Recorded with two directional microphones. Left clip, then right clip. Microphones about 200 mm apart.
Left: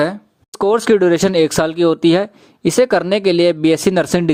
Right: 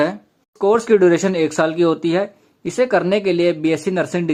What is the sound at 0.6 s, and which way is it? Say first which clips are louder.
Speech: left 1 dB; 35° left (ahead or behind).